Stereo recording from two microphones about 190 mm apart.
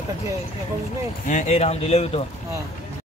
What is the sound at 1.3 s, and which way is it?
Speech, 35° left (ahead or behind).